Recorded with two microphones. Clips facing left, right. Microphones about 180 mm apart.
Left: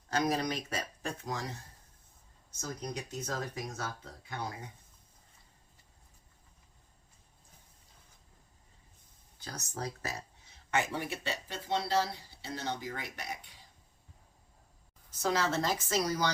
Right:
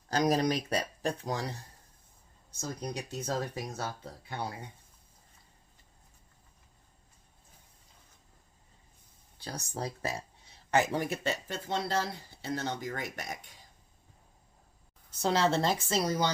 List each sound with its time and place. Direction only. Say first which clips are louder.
0.1 s speech: right 4 dB; 35° right (ahead or behind)
2.5 s speech: right 2 dB; 30° right (ahead or behind)
9.4 s speech: right 3 dB; 30° right (ahead or behind)
10.7 s speech: right 5 dB; 40° right (ahead or behind)
15.2 s speech: right 4 dB; 30° right (ahead or behind)